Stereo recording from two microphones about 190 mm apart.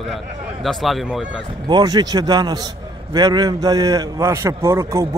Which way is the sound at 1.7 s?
20° right (ahead or behind).